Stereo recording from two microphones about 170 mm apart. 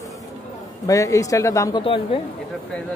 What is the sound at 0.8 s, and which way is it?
Speech, 20° left (ahead or behind).